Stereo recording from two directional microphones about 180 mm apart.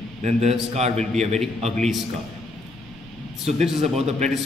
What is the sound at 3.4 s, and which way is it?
Speech, 35° right (ahead or behind).